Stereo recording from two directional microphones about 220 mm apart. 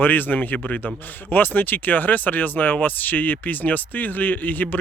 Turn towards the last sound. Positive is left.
turn(degrees=10)  # may be behind; listen again after turning